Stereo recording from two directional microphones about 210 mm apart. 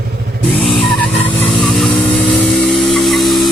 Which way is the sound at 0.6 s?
Centre (ahead or behind).